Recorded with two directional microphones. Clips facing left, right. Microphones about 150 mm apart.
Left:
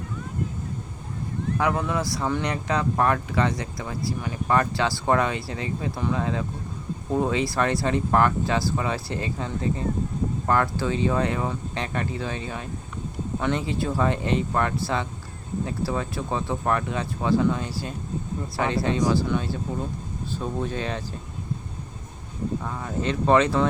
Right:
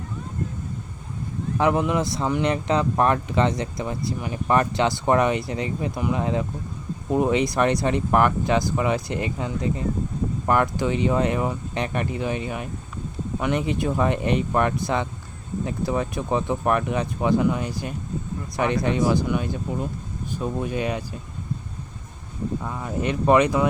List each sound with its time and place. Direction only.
1.5 s speech: 20° right (ahead or behind)
22.6 s speech: 15° right (ahead or behind)